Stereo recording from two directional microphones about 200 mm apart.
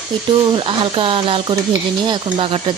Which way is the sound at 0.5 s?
25° right (ahead or behind).